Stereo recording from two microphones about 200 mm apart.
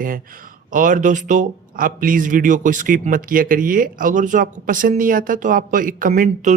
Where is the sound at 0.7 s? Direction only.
40° right (ahead or behind).